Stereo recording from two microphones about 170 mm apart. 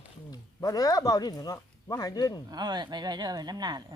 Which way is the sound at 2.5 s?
25° right (ahead or behind).